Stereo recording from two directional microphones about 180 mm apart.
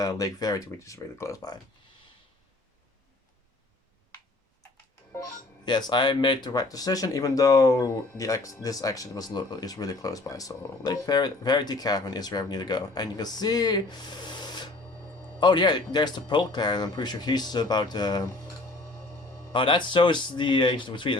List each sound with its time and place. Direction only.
0.0 s speech: 20° left (ahead or behind)
5.6 s speech: 25° left (ahead or behind)
19.5 s speech: 25° left (ahead or behind)